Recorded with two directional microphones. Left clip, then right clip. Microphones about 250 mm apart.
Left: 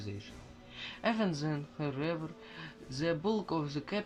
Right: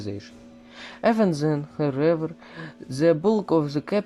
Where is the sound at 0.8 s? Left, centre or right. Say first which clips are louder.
Right 12 dB; right.